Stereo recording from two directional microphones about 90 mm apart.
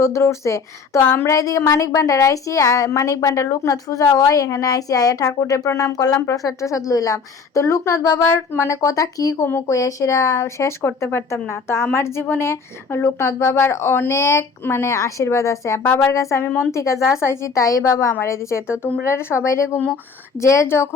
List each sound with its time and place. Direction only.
0.0 s a woman's voice: 30° left (ahead or behind)